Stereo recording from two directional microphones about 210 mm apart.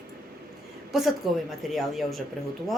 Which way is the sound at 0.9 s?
Centre (ahead or behind).